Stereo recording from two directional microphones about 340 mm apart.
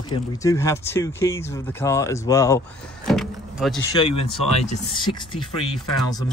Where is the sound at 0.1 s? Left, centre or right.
Centre.